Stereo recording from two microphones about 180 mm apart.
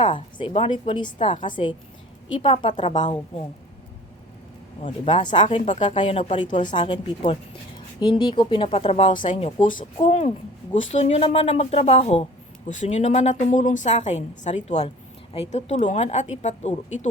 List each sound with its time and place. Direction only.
0.0 s speech: 30° left (ahead or behind)
5.0 s a woman's voice: 25° left (ahead or behind)